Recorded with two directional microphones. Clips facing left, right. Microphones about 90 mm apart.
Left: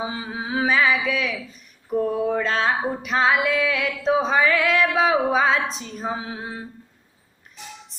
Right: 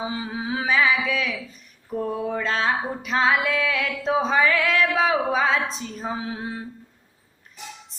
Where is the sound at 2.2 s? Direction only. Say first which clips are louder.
Left 2 dB; 40° left (ahead or behind).